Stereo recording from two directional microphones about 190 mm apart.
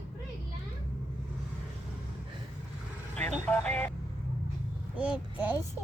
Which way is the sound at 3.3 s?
5° left (ahead or behind).